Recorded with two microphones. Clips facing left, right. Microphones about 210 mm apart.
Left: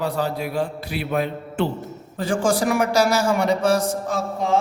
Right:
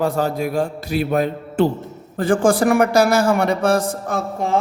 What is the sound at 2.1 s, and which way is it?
A woman's voice, 55° right (ahead or behind).